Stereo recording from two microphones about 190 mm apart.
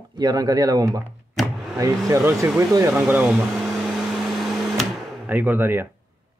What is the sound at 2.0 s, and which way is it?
Speech, 15° right (ahead or behind).